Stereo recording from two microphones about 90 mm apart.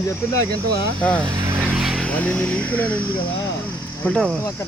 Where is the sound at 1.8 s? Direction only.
5° right (ahead or behind).